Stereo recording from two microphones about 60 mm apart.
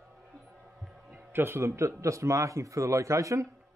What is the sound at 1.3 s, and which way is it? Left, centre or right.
Speech, right.